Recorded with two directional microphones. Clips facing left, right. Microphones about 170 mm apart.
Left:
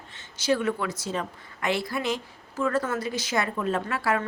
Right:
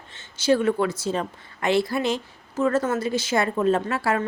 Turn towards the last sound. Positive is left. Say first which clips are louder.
# right 3 dB
turn(degrees=-25)  # may be behind; listen again after turning